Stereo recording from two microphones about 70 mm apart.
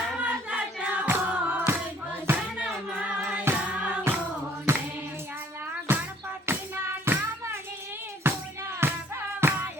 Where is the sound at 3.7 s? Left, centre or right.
Centre.